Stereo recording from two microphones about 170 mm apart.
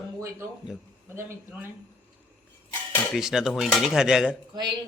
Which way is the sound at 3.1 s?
5° right (ahead or behind).